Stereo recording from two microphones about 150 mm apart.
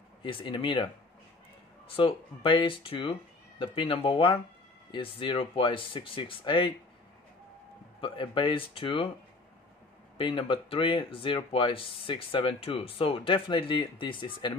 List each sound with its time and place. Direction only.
0.2 s speech: 35° left (ahead or behind)
2.0 s speech: 35° left (ahead or behind)
8.0 s speech: 35° left (ahead or behind)
10.1 s speech: 35° left (ahead or behind)